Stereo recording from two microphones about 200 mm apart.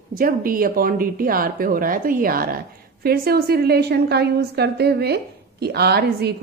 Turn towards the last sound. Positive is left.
turn(degrees=-55)  # may be behind; listen again after turning